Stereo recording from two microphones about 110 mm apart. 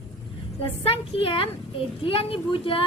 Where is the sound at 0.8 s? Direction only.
60° left (ahead or behind).